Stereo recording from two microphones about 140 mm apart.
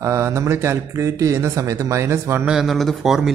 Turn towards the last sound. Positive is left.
turn(degrees=0)  # may be behind; listen again after turning